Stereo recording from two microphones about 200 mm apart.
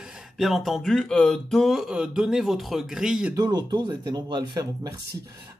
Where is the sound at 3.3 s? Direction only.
20° right (ahead or behind).